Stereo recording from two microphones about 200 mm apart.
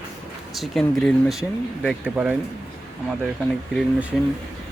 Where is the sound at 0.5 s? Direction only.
Centre (ahead or behind).